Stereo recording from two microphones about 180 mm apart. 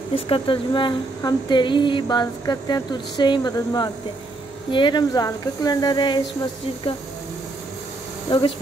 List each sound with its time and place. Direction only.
0.1 s a woman's voice: 30° left (ahead or behind)
8.3 s a woman's voice: 25° left (ahead or behind)